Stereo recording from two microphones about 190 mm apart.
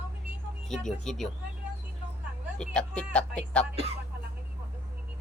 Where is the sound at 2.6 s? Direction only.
5° left (ahead or behind).